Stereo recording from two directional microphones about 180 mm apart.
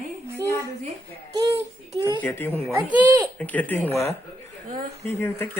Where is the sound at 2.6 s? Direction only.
10° right (ahead or behind).